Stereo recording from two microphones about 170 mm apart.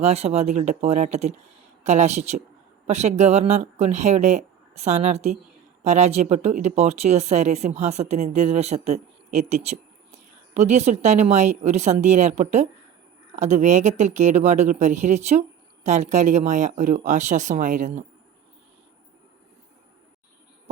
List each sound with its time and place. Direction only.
0.0 s speech: 40° right (ahead or behind)